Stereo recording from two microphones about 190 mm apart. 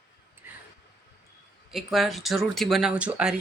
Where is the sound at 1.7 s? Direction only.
Centre (ahead or behind).